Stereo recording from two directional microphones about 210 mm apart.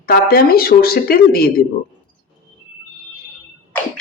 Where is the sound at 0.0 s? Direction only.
45° left (ahead or behind).